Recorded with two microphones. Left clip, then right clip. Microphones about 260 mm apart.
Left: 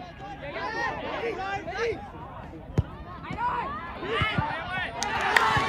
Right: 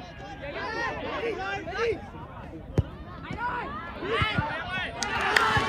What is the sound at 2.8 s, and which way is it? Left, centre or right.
Basketball bounce, left.